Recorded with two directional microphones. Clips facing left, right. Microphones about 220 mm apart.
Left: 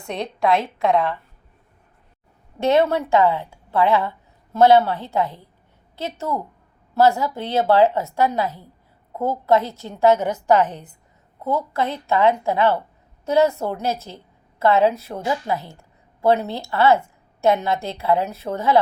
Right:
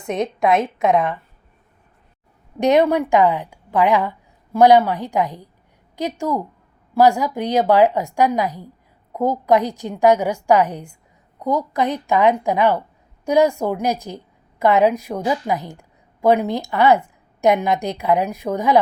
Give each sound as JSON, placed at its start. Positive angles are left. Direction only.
{"t": 0.0, "sound": "a woman's voice", "side_deg": -20}
{"t": 2.6, "sound": "a woman's voice", "side_deg": -15}